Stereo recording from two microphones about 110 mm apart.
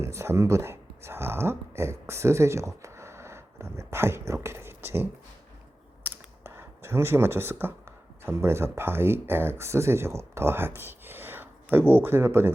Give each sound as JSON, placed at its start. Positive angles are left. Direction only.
{"t": 0.0, "sound": "speech", "side_deg": -25}
{"t": 6.0, "sound": "a sound", "side_deg": -20}
{"t": 8.2, "sound": "speech", "side_deg": -20}